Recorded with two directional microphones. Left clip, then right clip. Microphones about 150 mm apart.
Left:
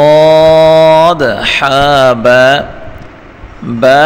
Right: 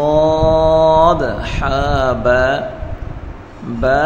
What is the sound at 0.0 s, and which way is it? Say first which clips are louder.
Mantra: left 9 dB; 50° left (ahead or behind).